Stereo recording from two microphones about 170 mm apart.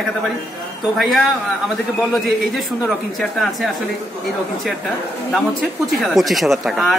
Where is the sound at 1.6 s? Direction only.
Centre (ahead or behind).